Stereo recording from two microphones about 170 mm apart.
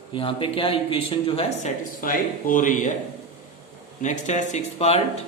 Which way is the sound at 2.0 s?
55° left (ahead or behind).